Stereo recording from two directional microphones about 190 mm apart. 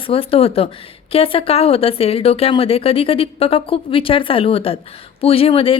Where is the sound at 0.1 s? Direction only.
30° left (ahead or behind).